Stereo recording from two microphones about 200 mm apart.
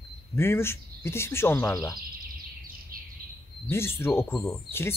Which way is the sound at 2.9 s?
45° right (ahead or behind).